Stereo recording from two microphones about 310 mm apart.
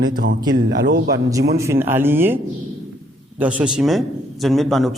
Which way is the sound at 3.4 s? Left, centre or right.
Centre.